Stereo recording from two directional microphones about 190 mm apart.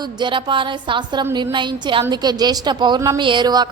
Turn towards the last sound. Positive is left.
turn(degrees=-20)  # may be behind; listen again after turning